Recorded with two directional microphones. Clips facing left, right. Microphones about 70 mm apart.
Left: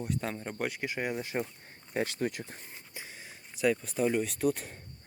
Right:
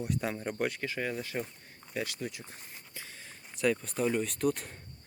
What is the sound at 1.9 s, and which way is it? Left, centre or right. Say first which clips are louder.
Speech: left 5 dB; left.